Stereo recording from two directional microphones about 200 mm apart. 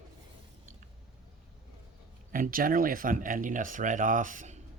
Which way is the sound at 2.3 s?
45° right (ahead or behind).